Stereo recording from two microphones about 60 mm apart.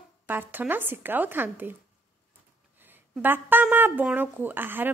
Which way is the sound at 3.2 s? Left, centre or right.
Right.